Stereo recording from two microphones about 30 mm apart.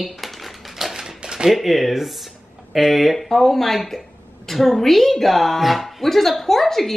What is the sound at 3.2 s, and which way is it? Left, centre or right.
Speech, centre.